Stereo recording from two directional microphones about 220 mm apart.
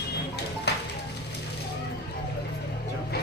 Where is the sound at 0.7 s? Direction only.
50° left (ahead or behind).